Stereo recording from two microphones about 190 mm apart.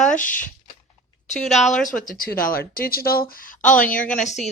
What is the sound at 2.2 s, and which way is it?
Speech, 50° left (ahead or behind).